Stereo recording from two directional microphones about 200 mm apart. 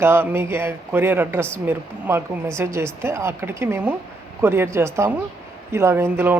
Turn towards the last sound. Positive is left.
turn(degrees=-10)  # may be behind; listen again after turning